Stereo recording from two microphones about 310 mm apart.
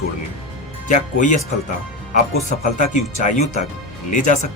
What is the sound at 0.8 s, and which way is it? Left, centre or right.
Speech, left.